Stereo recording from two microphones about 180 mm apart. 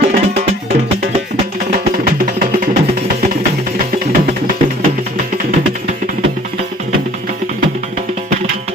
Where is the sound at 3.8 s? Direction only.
40° right (ahead or behind).